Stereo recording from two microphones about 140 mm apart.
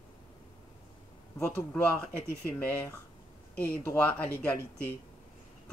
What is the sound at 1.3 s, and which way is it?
Speech, 10° left (ahead or behind).